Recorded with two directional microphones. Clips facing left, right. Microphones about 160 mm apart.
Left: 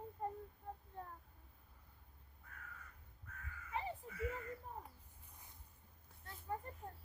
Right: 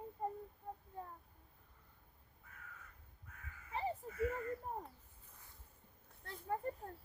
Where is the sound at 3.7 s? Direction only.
35° right (ahead or behind).